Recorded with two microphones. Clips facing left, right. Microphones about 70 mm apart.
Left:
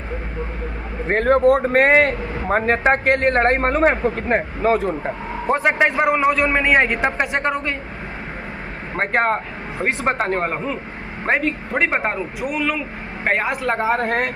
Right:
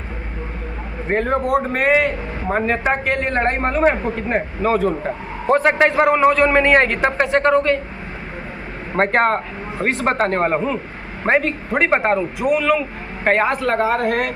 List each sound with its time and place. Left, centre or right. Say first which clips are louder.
1.1 s a man's voice: left 3 dB; left
5.5 s a man's voice: right 3 dB; centre
9.0 s a man's voice: right 3 dB; centre
10.4 s a man's voice: right 5 dB; centre
13.9 s a woman's voice: right 1 dB; left